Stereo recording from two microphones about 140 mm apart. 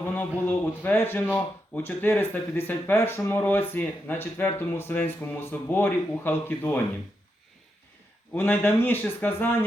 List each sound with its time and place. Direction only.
0.0 s speech: 15° left (ahead or behind)
8.4 s speech: 15° left (ahead or behind)